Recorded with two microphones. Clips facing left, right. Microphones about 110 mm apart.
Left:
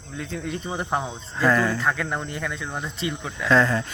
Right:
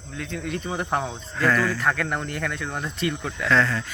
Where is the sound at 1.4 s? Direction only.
15° left (ahead or behind).